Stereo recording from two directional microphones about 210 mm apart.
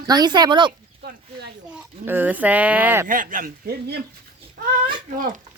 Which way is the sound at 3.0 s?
40° right (ahead or behind).